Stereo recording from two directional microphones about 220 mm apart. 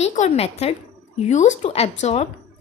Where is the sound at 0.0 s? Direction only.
30° left (ahead or behind).